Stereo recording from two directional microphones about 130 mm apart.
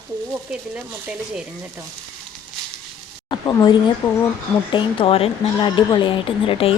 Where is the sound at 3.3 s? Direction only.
35° left (ahead or behind).